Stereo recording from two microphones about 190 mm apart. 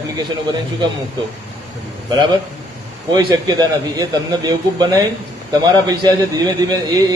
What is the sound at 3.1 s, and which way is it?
A man's voice, 20° right (ahead or behind).